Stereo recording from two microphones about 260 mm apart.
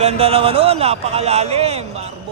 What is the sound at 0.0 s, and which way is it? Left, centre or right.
A man's voice, right.